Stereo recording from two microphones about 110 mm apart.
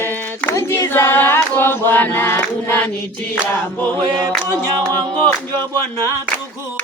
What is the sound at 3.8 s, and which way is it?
Choir, 15° left (ahead or behind).